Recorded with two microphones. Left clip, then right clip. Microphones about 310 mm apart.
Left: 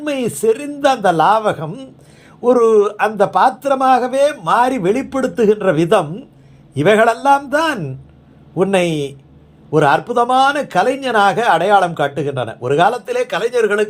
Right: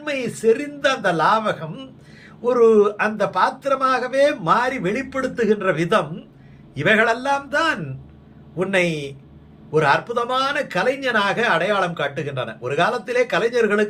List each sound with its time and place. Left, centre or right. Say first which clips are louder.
0.0 s speech: left 4 dB; left